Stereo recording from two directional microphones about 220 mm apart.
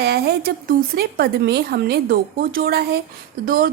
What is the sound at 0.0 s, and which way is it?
A woman's voice, 45° right (ahead or behind).